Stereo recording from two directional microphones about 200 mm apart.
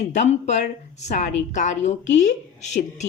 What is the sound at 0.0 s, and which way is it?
A woman's voice, 35° left (ahead or behind).